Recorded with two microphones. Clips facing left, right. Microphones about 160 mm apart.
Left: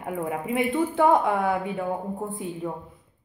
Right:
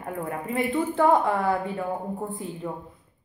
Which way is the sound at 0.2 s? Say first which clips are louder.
Left 2 dB; 5° left (ahead or behind).